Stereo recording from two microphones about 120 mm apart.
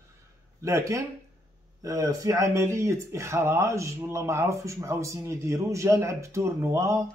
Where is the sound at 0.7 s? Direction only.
25° right (ahead or behind).